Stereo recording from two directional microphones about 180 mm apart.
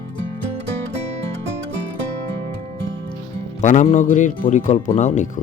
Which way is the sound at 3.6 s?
45° left (ahead or behind).